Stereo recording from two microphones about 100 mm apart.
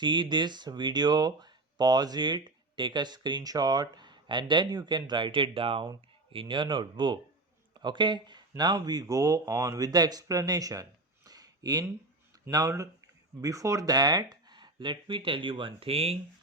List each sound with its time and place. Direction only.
0.0 s speech: 50° right (ahead or behind)
11.3 s a sound: 40° right (ahead or behind)
12.5 s speech: 35° right (ahead or behind); by 16.1 s 80° right